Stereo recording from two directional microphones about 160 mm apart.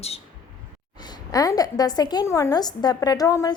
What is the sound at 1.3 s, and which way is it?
A woman's voice, 25° left (ahead or behind).